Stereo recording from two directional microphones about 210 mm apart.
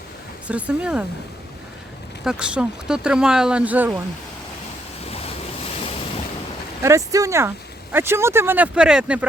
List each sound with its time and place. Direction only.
0.4 s speech: 5° right (ahead or behind)
2.2 s speech: 5° right (ahead or behind)
5.0 s waves: 30° left (ahead or behind)
6.8 s speech: 15° right (ahead or behind)